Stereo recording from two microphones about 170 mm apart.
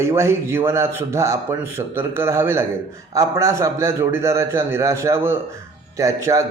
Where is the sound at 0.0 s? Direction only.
15° right (ahead or behind).